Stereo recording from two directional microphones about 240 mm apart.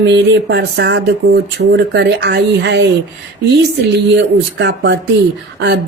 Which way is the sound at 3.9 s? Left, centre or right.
Right.